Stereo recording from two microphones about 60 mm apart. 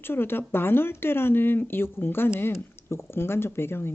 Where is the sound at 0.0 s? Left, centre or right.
Left.